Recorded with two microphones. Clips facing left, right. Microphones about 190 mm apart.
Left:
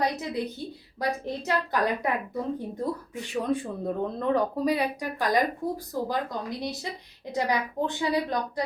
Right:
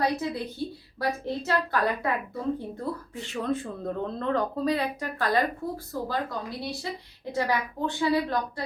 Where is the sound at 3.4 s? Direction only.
15° left (ahead or behind).